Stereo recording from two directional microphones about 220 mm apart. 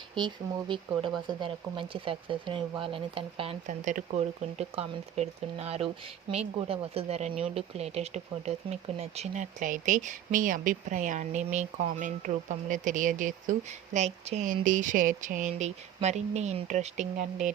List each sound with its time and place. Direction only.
0.1 s speech: 20° right (ahead or behind)